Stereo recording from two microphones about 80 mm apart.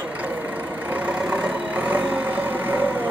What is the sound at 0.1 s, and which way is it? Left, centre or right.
Vehicle, centre.